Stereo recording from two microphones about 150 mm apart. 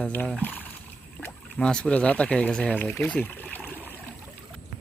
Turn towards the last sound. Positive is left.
turn(degrees=10)  # may be behind; listen again after turning